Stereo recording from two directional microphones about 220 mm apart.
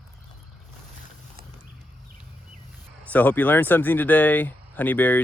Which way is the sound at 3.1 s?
10° left (ahead or behind).